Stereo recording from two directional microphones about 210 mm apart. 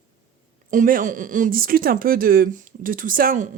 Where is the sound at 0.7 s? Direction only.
40° right (ahead or behind).